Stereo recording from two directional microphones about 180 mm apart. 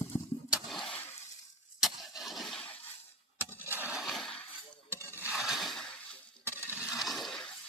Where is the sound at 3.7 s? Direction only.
10° right (ahead or behind).